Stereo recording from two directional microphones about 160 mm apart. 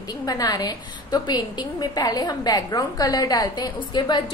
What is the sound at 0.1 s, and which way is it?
A woman's voice, 25° left (ahead or behind).